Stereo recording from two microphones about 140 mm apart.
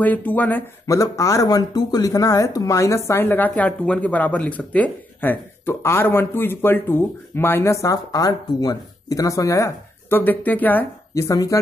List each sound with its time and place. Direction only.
0.0 s speech: 10° left (ahead or behind)
11.2 s speech: 25° left (ahead or behind)